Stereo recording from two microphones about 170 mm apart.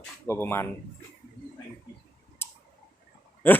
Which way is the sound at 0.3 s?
15° left (ahead or behind).